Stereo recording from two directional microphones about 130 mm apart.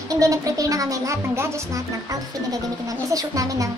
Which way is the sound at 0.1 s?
25° right (ahead or behind).